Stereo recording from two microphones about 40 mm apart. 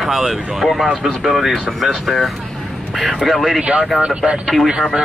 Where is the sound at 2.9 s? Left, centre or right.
Centre.